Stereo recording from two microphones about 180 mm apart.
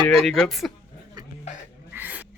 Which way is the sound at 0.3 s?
Centre (ahead or behind).